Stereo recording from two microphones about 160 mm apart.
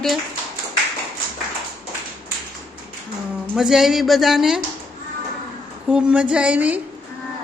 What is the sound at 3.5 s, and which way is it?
Speech, 5° right (ahead or behind).